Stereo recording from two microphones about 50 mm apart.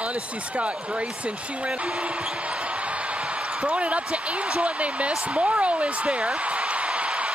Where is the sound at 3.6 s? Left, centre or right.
Right.